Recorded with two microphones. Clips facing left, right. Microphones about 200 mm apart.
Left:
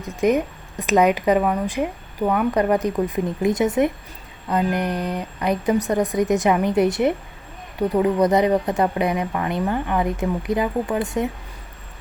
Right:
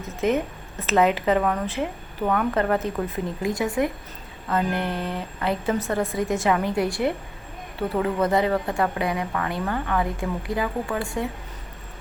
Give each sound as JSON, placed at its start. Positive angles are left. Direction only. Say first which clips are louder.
{"t": 0.0, "sound": "a woman's voice", "louder": "left 4 dB", "side_deg": 15}